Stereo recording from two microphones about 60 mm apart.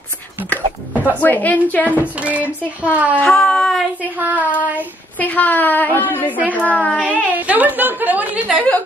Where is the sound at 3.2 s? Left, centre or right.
Centre.